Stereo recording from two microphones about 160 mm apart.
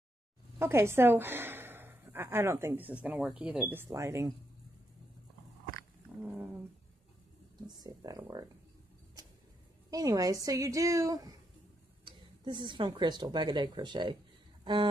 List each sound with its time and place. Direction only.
0.6 s a woman's voice: 15° right (ahead or behind)
6.2 s dog: 10° right (ahead or behind)
7.6 s a woman's voice: 25° right (ahead or behind)
9.8 s a woman's voice: 20° right (ahead or behind)
14.6 s a sound: 30° right (ahead or behind)